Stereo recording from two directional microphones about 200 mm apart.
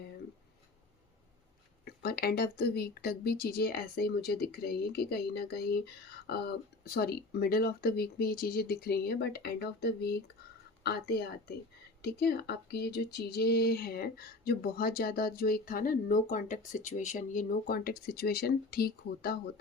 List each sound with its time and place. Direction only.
1.8 s speech: 50° left (ahead or behind)